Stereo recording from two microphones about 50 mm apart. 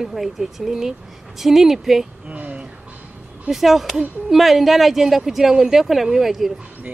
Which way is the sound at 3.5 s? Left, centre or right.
Centre.